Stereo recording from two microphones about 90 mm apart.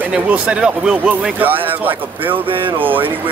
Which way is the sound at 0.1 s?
10° right (ahead or behind).